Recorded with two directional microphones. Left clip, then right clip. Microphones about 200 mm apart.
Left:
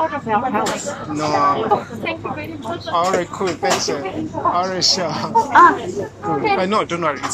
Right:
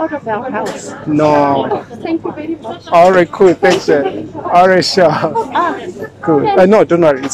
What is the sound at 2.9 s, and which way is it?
Speech, 55° right (ahead or behind).